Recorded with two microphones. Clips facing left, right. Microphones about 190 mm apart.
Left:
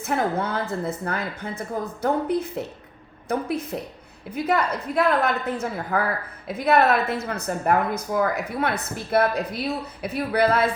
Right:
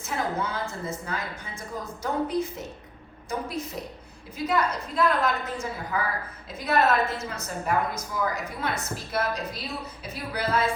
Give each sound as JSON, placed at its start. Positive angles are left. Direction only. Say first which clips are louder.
{"t": 0.0, "sound": "a woman's voice", "louder": "left 5 dB", "side_deg": 60}